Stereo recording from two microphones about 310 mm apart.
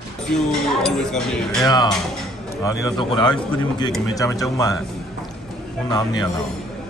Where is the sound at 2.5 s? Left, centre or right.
Centre.